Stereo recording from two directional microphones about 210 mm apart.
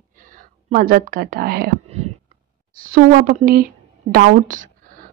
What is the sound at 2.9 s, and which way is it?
Speech, 45° right (ahead or behind).